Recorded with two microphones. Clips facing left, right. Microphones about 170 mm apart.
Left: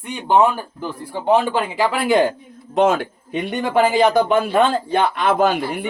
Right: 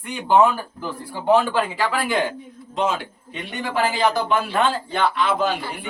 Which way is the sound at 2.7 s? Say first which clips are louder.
Left 7 dB; 50° left (ahead or behind).